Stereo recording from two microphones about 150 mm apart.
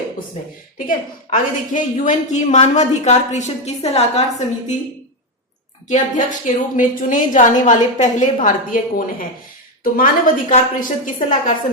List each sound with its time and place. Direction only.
0.9 s a woman's voice: 60° left (ahead or behind); by 4.4 s 45° left (ahead or behind)
5.9 s a woman's voice: 60° left (ahead or behind)